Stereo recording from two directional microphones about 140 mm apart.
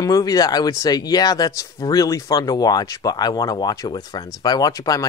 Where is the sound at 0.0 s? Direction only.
25° left (ahead or behind).